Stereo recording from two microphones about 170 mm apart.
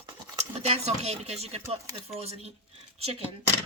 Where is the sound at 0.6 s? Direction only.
40° right (ahead or behind).